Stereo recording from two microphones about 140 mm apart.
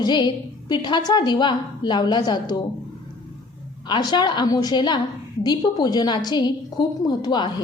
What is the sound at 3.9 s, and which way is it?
A woman's voice, 30° left (ahead or behind).